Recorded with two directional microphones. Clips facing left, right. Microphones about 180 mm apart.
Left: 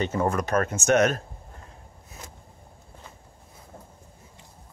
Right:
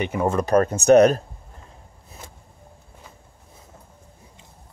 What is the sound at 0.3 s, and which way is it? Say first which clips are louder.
Speech: right 6 dB; 30° right (ahead or behind).